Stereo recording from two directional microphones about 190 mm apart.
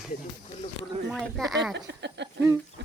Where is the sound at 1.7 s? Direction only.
65° right (ahead or behind).